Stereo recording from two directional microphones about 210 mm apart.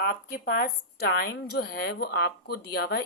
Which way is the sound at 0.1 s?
45° left (ahead or behind).